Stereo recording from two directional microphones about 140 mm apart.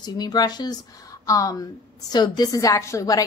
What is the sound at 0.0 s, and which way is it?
A woman's voice, 30° left (ahead or behind).